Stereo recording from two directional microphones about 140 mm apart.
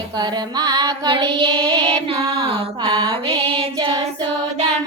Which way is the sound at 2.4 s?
40° right (ahead or behind).